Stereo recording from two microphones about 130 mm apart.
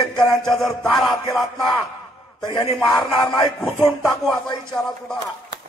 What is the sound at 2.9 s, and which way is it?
Speech, centre (ahead or behind).